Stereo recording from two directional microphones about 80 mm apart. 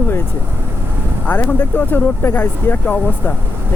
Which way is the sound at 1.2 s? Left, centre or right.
Left.